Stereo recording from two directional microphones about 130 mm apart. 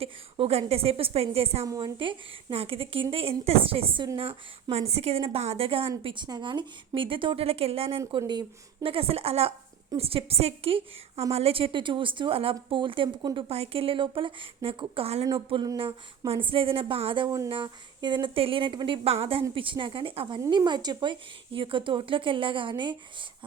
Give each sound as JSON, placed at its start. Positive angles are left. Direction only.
{"t": 0.0, "sound": "a woman's voice", "side_deg": -50}
{"t": 1.6, "sound": "speech", "side_deg": -25}
{"t": 2.0, "sound": "a woman's voice", "side_deg": -45}
{"t": 15.4, "sound": "a woman's voice", "side_deg": -40}
{"t": 17.2, "sound": "speech", "side_deg": -25}
{"t": 17.5, "sound": "a woman's voice", "side_deg": -35}
{"t": 19.0, "sound": "a woman's voice", "side_deg": -50}